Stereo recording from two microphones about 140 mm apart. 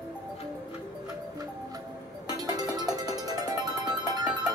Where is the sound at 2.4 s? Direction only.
30° right (ahead or behind).